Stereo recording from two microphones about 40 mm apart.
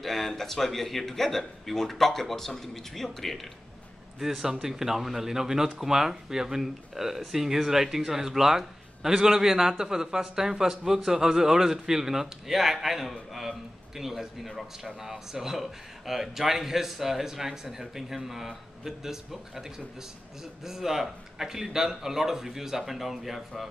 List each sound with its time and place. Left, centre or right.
0.0 s a man's voice: centre
4.2 s a man's voice: centre
20.6 s speech: centre